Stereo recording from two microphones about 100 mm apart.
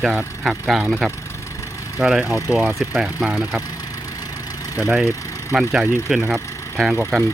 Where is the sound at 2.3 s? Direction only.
35° left (ahead or behind).